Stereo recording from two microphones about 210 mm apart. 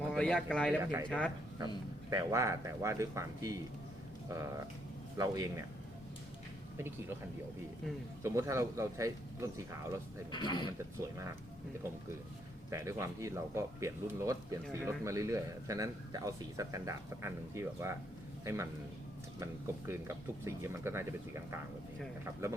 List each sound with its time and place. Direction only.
0.1 s speech: 5° left (ahead or behind)
0.8 s speech: 15° right (ahead or behind)
1.0 s speech: 5° left (ahead or behind)
1.5 s speech: 20° right (ahead or behind)
8.2 s speech: 15° right (ahead or behind)
10.3 s speech: 20° left (ahead or behind)
10.7 s speech: 15° right (ahead or behind)
12.7 s speech: 15° right (ahead or behind)
20.4 s speech: 15° right (ahead or behind)
22.2 s speech: 15° right (ahead or behind)